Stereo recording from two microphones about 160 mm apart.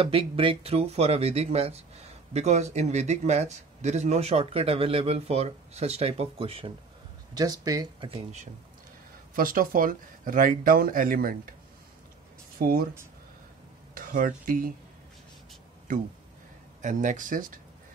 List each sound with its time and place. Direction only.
0.0 s speech: 35° right (ahead or behind)
7.3 s speech: 25° right (ahead or behind)
9.3 s speech: 60° right (ahead or behind)
12.5 s speech: 70° right (ahead or behind)
13.9 s speech: 60° right (ahead or behind)
16.8 s speech: 50° right (ahead or behind)